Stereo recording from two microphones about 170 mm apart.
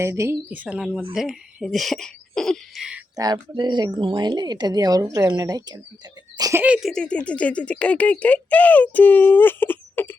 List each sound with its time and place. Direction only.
0.0 s speech: 15° right (ahead or behind)
3.2 s speech: 25° right (ahead or behind); by 10.2 s 10° left (ahead or behind)